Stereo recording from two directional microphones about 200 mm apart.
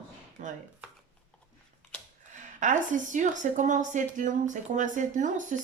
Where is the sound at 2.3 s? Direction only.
40° right (ahead or behind).